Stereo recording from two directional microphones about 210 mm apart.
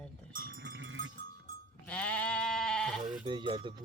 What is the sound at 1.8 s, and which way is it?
Sheep, 5° left (ahead or behind).